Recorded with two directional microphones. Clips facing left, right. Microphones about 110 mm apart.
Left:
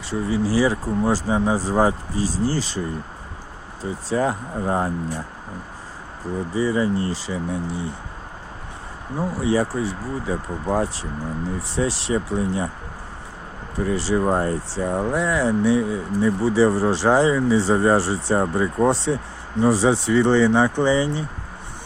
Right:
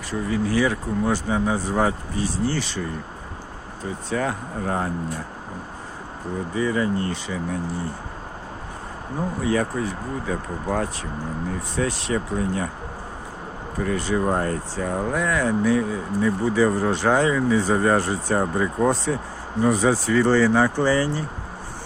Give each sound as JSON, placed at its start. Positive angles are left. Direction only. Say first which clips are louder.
{"t": 0.1, "sound": "speech", "louder": "left 2 dB", "side_deg": 30}
{"t": 4.1, "sound": "speech", "louder": "left 4 dB", "side_deg": 30}
{"t": 6.5, "sound": "speech", "louder": "left 2 dB", "side_deg": 30}
{"t": 9.4, "sound": "speech", "louder": "left 2 dB", "side_deg": 30}
{"t": 13.7, "sound": "speech", "louder": "left 2 dB", "side_deg": 30}